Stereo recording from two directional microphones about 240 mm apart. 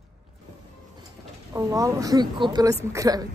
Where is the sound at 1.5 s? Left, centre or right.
Centre.